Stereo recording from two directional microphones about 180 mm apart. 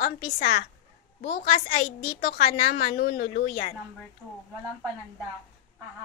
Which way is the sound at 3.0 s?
55° left (ahead or behind).